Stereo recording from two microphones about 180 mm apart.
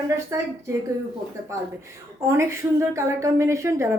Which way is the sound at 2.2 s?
15° right (ahead or behind).